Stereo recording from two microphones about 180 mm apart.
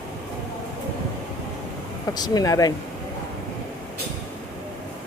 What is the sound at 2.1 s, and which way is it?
Speech, 20° left (ahead or behind).